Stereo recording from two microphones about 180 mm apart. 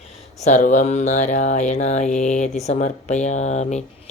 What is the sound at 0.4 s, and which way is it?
Speech, 45° left (ahead or behind).